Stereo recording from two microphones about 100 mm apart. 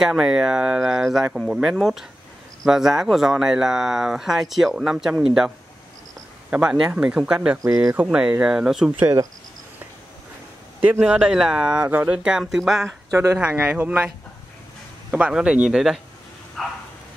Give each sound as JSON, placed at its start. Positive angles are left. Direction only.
{"t": 0.0, "sound": "speech", "side_deg": -5}
{"t": 6.5, "sound": "speech", "side_deg": -10}
{"t": 9.0, "sound": "speech", "side_deg": -35}
{"t": 10.9, "sound": "speech", "side_deg": -10}
{"t": 13.1, "sound": "speech", "side_deg": -30}
{"t": 13.4, "sound": "speech", "side_deg": -10}